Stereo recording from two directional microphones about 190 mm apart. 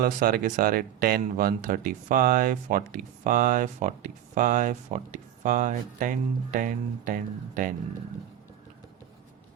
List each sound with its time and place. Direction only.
0.0 s speech: 50° right (ahead or behind)